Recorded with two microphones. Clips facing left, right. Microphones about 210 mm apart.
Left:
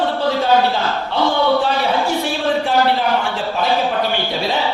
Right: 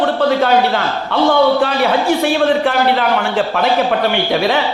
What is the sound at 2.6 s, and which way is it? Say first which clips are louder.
A man's voice: right 2 dB; 70° right (ahead or behind).